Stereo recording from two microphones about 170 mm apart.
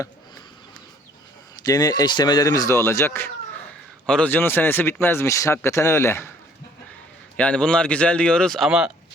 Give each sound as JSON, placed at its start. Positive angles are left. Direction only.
{"t": 1.6, "sound": "speech", "side_deg": 25}
{"t": 7.3, "sound": "speech", "side_deg": 5}